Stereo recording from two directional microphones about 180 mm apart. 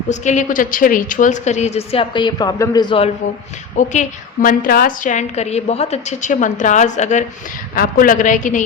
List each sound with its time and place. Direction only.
0.1 s a woman's voice: 40° left (ahead or behind); by 3.0 s 20° left (ahead or behind)
3.8 s a woman's voice: 45° left (ahead or behind)